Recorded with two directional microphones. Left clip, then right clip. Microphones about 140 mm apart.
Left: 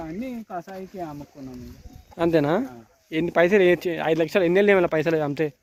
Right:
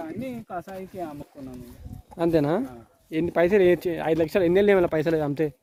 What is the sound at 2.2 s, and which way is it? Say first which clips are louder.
Speech: left 2 dB; 10° right (ahead or behind).